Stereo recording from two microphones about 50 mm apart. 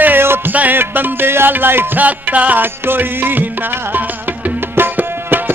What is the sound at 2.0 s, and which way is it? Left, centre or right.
Music, right.